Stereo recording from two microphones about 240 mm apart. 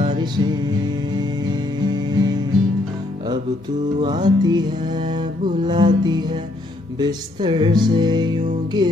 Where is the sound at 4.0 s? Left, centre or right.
Centre.